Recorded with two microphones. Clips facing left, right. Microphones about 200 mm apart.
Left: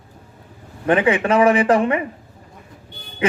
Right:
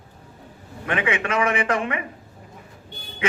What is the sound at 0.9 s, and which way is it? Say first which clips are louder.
A man's voice: left 8 dB; 35° left (ahead or behind).